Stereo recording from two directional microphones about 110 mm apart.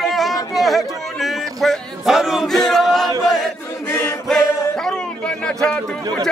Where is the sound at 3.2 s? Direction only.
Centre (ahead or behind).